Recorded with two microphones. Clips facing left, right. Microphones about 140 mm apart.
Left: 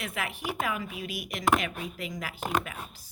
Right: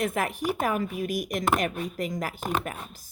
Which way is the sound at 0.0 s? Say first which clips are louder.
Right 8 dB; 45° right (ahead or behind).